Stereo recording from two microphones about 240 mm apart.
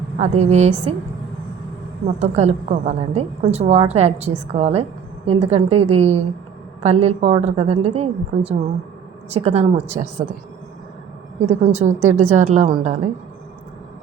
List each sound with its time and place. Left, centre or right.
0.2 s a woman's voice: right
2.0 s a woman's voice: right
9.3 s a woman's voice: right
11.3 s a woman's voice: right